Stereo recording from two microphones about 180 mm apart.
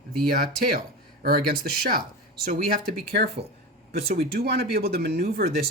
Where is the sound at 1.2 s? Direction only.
55° right (ahead or behind).